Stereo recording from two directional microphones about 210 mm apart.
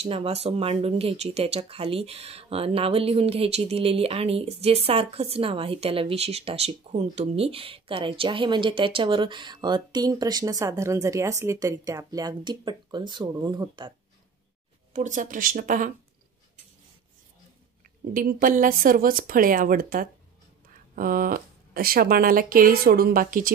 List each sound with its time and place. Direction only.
0.0 s a woman's voice: 30° right (ahead or behind)
14.9 s speech: 35° right (ahead or behind)
18.1 s speech: 40° right (ahead or behind)